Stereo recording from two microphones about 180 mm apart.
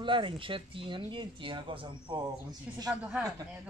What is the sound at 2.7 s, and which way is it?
Speech, 5° right (ahead or behind).